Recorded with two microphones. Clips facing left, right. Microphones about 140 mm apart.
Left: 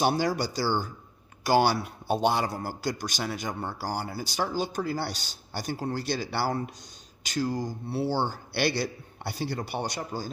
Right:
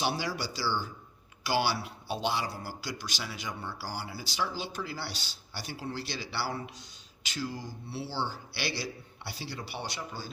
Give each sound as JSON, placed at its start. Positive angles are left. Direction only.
{"t": 0.0, "sound": "a man's voice", "side_deg": 50}